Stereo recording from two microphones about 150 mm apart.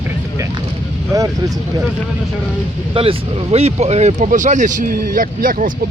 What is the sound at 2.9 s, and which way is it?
Speech, 40° right (ahead or behind).